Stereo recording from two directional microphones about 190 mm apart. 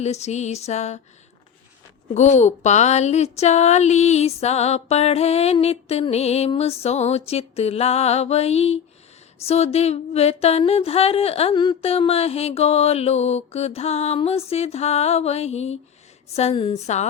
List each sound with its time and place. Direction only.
0.0 s speech: 35° left (ahead or behind)
2.1 s speech: 35° left (ahead or behind)